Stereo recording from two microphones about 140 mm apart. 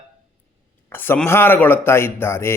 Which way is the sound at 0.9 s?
15° left (ahead or behind).